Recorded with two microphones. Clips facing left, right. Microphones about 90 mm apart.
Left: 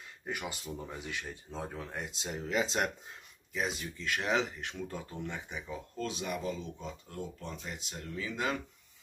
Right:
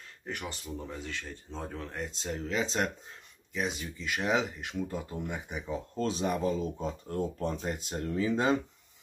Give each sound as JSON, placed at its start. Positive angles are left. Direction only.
{"t": 0.3, "sound": "speech", "side_deg": 10}
{"t": 5.9, "sound": "speech", "side_deg": -35}